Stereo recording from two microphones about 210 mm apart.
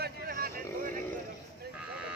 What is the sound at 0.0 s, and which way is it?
Vehicle, 45° right (ahead or behind).